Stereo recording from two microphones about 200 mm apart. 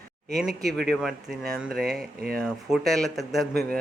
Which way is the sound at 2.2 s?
50° right (ahead or behind).